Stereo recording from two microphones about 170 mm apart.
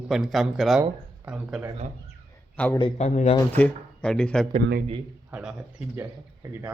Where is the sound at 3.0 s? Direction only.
45° left (ahead or behind).